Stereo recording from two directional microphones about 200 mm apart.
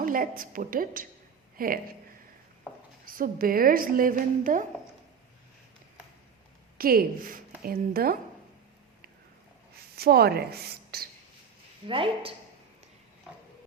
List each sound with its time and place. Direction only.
0.0 s a woman's voice: 45° right (ahead or behind)
3.1 s a woman's voice: 45° right (ahead or behind)
6.7 s a woman's voice: 45° right (ahead or behind)
9.9 s a woman's voice: 50° right (ahead or behind)
11.9 s speech: 25° right (ahead or behind)